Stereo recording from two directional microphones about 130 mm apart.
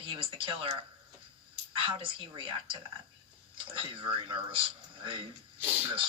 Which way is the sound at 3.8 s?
40° right (ahead or behind).